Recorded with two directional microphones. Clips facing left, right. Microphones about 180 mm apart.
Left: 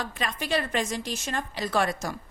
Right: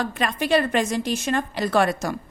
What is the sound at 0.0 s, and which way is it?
A woman's voice, 60° right (ahead or behind).